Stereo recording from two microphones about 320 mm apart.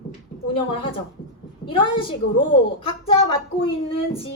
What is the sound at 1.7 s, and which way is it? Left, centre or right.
Speech, centre.